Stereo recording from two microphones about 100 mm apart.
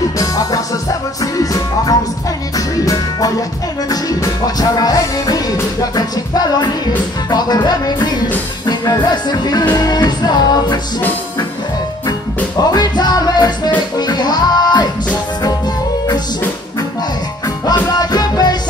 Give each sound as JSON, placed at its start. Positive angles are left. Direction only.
{"t": 0.2, "sound": "music", "side_deg": 40}
{"t": 12.7, "sound": "music", "side_deg": 45}
{"t": 17.6, "sound": "music", "side_deg": 40}